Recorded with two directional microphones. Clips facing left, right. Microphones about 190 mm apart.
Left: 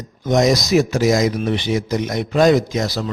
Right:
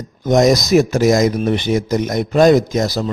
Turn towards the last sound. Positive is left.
turn(degrees=-45)  # may be behind; listen again after turning